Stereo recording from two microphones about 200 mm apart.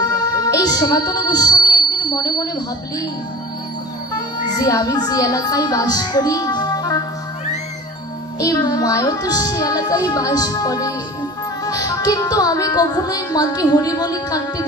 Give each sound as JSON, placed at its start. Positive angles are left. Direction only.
{"t": 0.0, "sound": "music", "side_deg": 20}
{"t": 4.1, "sound": "speech", "side_deg": 20}
{"t": 8.4, "sound": "music", "side_deg": 20}